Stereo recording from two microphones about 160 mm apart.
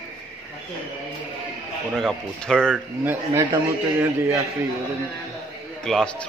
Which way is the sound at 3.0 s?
15° right (ahead or behind).